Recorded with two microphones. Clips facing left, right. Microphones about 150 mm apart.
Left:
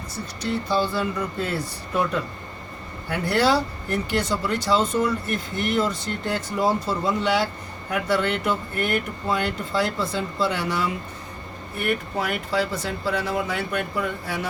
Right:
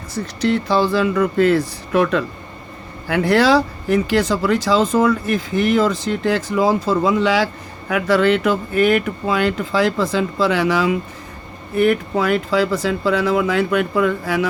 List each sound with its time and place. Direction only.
0.4 s speech: 90° right